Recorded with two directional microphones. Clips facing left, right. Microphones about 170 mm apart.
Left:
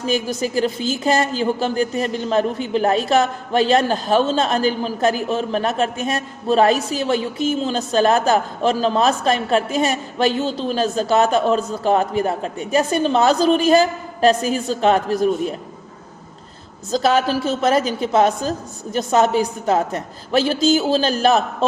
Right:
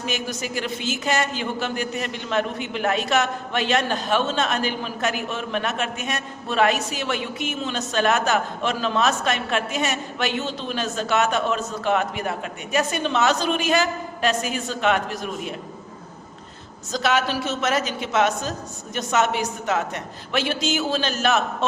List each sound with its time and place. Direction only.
0.0 s a man's voice: 35° left (ahead or behind)
16.9 s a man's voice: 35° left (ahead or behind)